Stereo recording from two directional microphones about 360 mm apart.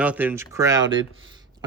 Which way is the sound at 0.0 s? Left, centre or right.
Centre.